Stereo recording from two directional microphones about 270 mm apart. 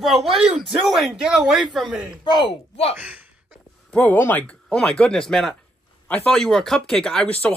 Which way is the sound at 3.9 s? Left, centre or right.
Centre.